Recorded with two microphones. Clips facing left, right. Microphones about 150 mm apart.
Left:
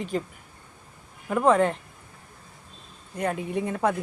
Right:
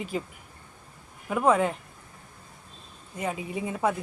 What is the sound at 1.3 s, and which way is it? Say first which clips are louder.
Speech: left 2 dB; 5° right (ahead or behind).